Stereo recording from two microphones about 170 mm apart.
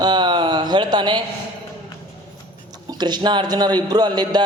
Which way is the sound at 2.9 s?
25° right (ahead or behind).